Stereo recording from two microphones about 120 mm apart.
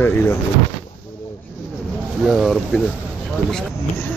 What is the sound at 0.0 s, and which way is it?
Speech, 20° left (ahead or behind).